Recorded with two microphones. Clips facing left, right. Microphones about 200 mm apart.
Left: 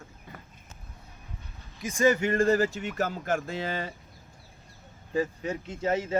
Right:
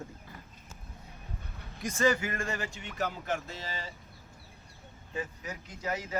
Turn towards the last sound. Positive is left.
turn(degrees=25)  # may be behind; listen again after turning